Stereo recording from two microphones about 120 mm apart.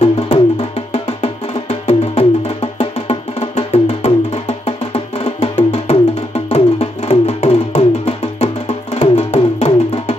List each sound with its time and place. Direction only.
0.0 s music: 55° left (ahead or behind)